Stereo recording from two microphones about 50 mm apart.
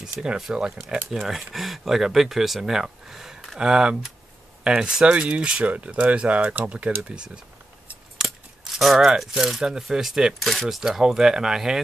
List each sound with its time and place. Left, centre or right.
0.1 s speech: centre
1.1 s speech: centre; by 6.9 s right
8.7 s speech: centre
10.8 s speech: centre